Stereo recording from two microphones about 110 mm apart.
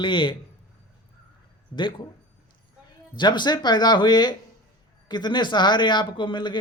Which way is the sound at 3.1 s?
45° left (ahead or behind).